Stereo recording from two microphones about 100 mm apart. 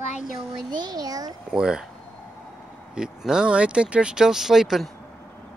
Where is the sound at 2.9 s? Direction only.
5° right (ahead or behind).